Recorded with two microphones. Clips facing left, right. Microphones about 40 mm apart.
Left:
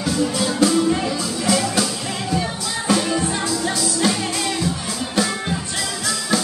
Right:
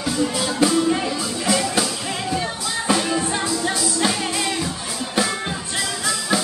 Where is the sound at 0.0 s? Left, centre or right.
Centre.